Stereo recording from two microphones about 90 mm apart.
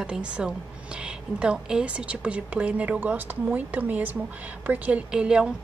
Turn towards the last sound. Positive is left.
turn(degrees=-10)  # may be behind; listen again after turning